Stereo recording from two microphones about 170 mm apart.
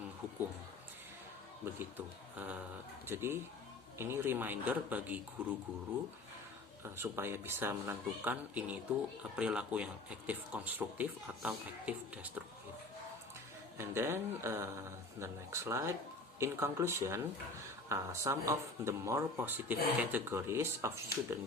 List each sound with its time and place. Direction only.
1.6 s speech: 10° right (ahead or behind)
6.8 s speech: 15° right (ahead or behind)
13.7 s speech: 15° right (ahead or behind)